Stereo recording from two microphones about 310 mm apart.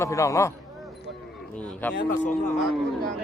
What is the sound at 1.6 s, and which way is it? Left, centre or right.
Speech, centre.